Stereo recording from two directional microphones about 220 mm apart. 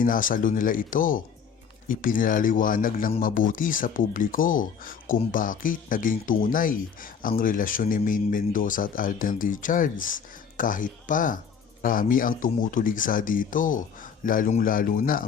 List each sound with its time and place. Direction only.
0.0 s speech: 40° left (ahead or behind)